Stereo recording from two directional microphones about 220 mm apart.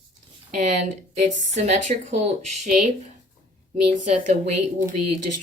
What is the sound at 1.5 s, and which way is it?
Speech, 35° right (ahead or behind).